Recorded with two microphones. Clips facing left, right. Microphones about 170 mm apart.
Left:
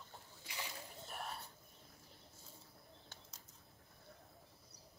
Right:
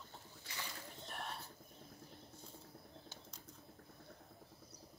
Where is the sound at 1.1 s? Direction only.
Centre (ahead or behind).